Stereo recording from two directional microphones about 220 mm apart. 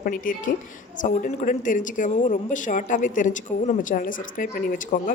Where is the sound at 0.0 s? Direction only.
40° left (ahead or behind).